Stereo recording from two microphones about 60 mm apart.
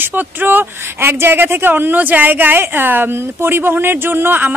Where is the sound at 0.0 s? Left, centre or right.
Right.